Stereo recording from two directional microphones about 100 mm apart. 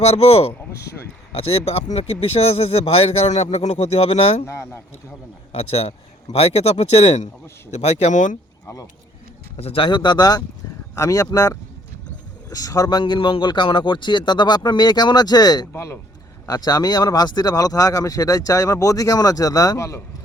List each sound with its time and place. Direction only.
0.0 s speech: 90° left
4.4 s speech: 25° left (ahead or behind)
5.5 s speech: 90° left
7.8 s speech: 90° left
9.6 s a man's voice: 75° left (ahead or behind); by 15.7 s 40° left (ahead or behind)
15.7 s speech: 25° left (ahead or behind)
16.5 s speech: 40° left (ahead or behind)